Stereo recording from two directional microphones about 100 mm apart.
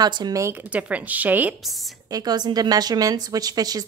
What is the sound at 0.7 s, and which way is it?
Speech, 15° right (ahead or behind).